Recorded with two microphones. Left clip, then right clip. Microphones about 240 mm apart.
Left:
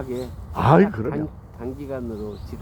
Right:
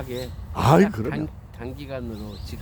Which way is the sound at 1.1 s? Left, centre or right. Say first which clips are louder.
Left 2 dB; right.